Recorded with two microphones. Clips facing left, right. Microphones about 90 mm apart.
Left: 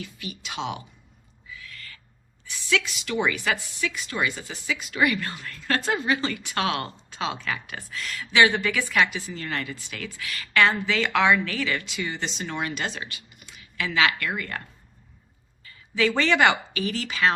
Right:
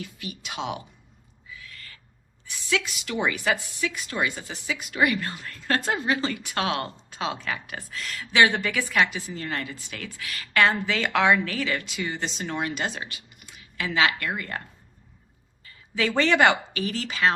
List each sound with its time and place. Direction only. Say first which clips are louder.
0.0 s speech: even; 45° right (ahead or behind)
1.6 s owl: left 2 dB; 30° right (ahead or behind)
3.2 s a woman's voice: right 2 dB; 25° right (ahead or behind)
3.8 s speech: even; 40° right (ahead or behind)
5.0 s a woman's voice: even; 30° right (ahead or behind)
7.7 s a woman's voice: left 1 dB; 40° right (ahead or behind)
12.8 s a woman's voice: right 1 dB; 20° right (ahead or behind)
13.7 s a woman's voice: even; 35° right (ahead or behind)
16.0 s a woman's voice: even; 40° right (ahead or behind)